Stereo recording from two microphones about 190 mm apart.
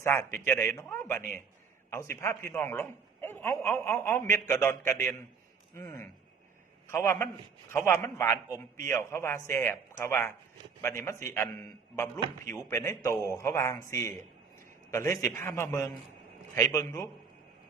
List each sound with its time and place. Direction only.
0.0 s speech: 15° left (ahead or behind)
5.7 s a sound: 15° left (ahead or behind)
6.8 s a man's voice: 15° left (ahead or behind)